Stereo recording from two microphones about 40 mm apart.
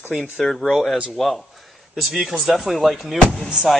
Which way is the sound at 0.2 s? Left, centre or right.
Centre.